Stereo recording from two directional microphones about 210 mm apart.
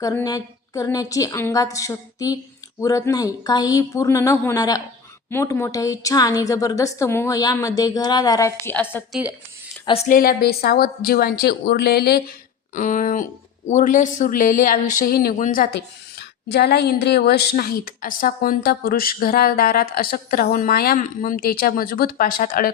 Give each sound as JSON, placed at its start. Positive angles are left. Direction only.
{"t": 0.0, "sound": "a woman's voice", "side_deg": 15}
{"t": 9.8, "sound": "speech", "side_deg": 25}
{"t": 10.1, "sound": "a woman's voice", "side_deg": 45}
{"t": 12.7, "sound": "speech", "side_deg": 40}
{"t": 16.5, "sound": "a woman's voice", "side_deg": 50}